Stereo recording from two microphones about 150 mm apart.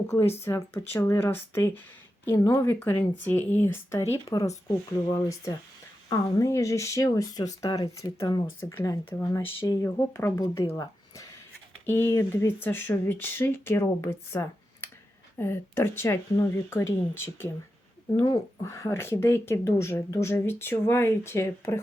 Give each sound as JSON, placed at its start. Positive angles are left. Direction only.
{"t": 0.4, "sound": "speech", "side_deg": 15}
{"t": 12.1, "sound": "speech", "side_deg": 15}